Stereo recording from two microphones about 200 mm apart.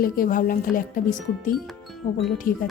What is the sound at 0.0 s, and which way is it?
Speech, 45° left (ahead or behind).